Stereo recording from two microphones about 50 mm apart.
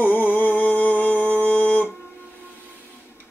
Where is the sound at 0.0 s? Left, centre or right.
Left.